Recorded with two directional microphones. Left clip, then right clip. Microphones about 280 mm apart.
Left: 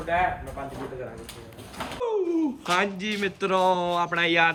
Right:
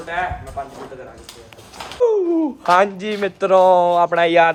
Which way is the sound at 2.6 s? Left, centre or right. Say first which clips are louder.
Right 10 dB; centre.